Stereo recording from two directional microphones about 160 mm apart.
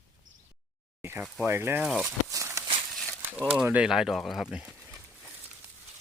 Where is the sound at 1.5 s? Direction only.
15° right (ahead or behind).